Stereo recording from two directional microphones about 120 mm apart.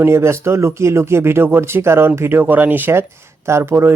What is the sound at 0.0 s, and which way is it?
Speech, 20° right (ahead or behind).